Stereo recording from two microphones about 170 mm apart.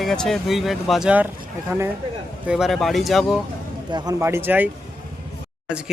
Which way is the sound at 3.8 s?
25° right (ahead or behind).